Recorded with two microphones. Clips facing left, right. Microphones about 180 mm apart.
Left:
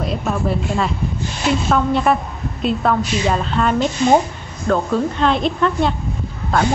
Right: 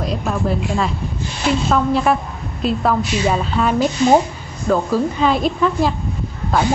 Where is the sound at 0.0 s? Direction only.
Centre (ahead or behind).